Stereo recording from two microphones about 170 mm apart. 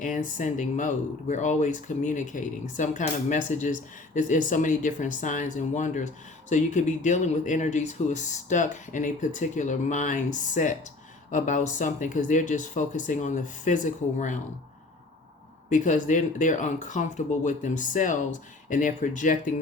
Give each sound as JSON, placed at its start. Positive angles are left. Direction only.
{"t": 0.0, "sound": "speech", "side_deg": 50}
{"t": 15.7, "sound": "speech", "side_deg": 45}